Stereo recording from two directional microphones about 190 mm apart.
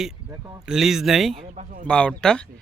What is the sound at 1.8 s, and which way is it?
Speech, 5° left (ahead or behind).